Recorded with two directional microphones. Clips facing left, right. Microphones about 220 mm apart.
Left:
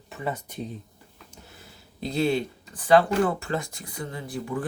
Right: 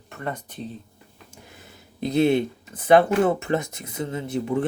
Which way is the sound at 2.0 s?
20° right (ahead or behind).